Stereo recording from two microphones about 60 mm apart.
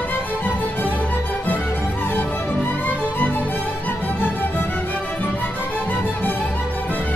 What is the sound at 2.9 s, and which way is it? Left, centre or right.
Music, left.